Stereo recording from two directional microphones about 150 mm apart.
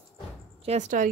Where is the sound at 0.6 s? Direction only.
50° right (ahead or behind).